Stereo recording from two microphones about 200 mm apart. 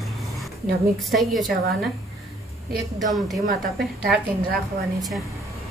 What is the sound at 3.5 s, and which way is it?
A woman's voice, 50° right (ahead or behind).